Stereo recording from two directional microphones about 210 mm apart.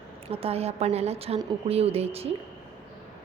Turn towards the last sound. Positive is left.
turn(degrees=-30)  # may be behind; listen again after turning